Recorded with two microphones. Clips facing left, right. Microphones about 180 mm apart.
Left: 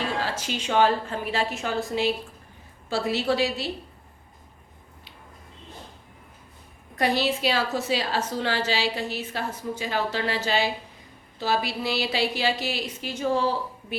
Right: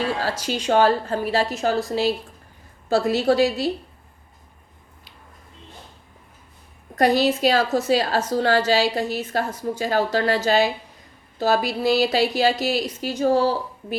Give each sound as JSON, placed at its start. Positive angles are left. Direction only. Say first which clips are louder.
{"t": 0.3, "sound": "a woman's voice", "louder": "right 6 dB", "side_deg": -40}
{"t": 6.9, "sound": "a woman's voice", "louder": "right 6 dB", "side_deg": -40}